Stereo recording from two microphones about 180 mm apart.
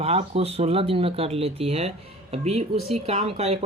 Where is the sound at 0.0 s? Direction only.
35° right (ahead or behind).